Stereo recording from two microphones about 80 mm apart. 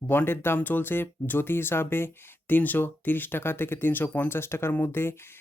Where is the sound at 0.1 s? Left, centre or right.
Left.